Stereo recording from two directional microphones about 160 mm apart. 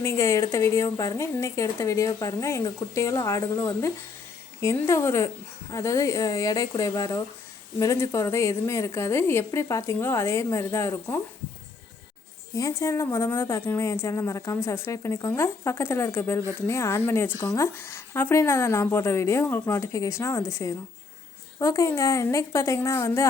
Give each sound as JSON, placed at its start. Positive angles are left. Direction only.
{"t": 0.0, "sound": "a woman's voice", "side_deg": 15}
{"t": 12.5, "sound": "a woman's voice", "side_deg": 20}